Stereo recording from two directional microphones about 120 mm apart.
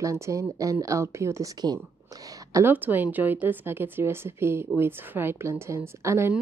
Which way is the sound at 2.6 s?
15° right (ahead or behind).